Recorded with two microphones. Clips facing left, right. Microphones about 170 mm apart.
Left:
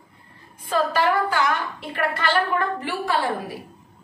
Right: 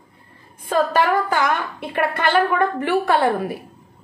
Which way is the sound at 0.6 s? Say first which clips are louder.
Right 3 dB; 50° right (ahead or behind).